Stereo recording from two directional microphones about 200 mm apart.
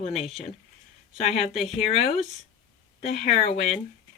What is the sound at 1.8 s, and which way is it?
Speech, 30° left (ahead or behind).